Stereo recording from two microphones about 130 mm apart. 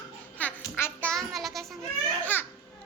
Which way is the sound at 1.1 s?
Centre (ahead or behind).